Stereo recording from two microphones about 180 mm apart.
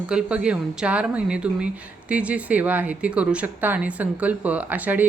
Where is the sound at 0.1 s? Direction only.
5° right (ahead or behind).